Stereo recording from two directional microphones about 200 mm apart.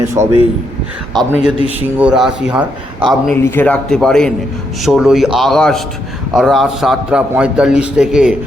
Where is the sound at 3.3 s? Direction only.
10° left (ahead or behind).